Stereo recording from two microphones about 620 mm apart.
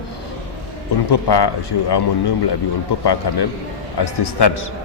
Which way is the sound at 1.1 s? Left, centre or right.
Left.